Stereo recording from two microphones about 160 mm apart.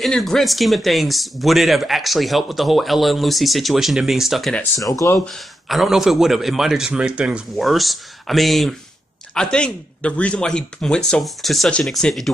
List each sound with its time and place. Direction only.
0.0 s speech: centre (ahead or behind)
4.7 s speech: 20° left (ahead or behind)
5.2 s speech: centre (ahead or behind)